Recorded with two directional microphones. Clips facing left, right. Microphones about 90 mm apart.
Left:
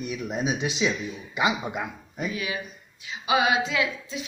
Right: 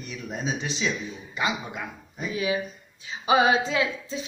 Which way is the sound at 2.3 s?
30° right (ahead or behind).